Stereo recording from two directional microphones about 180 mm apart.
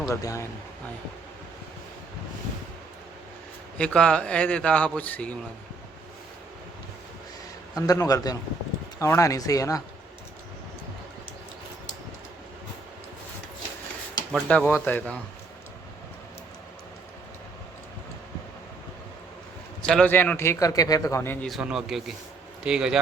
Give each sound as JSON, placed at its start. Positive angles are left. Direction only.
{"t": 0.0, "sound": "a man's voice", "side_deg": 20}
{"t": 3.8, "sound": "a man's voice", "side_deg": 5}
{"t": 7.8, "sound": "a man's voice", "side_deg": 20}
{"t": 14.3, "sound": "a man's voice", "side_deg": 10}
{"t": 19.8, "sound": "a man's voice", "side_deg": 5}
{"t": 21.5, "sound": "speech", "side_deg": -5}